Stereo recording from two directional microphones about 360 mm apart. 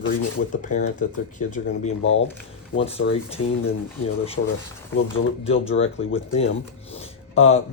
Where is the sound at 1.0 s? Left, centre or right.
Left.